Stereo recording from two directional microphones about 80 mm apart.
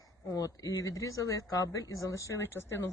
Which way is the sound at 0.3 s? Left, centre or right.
Left.